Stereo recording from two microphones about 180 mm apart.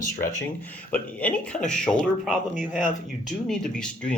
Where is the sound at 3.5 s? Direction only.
5° left (ahead or behind).